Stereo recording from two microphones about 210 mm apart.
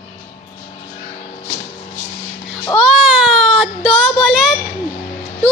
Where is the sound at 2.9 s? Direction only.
5° right (ahead or behind).